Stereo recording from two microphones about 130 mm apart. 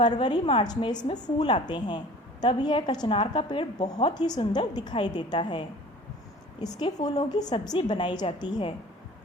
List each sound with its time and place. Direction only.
0.0 s a woman's voice: 35° left (ahead or behind)